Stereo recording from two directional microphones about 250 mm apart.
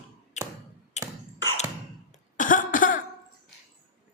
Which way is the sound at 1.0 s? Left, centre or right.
Left.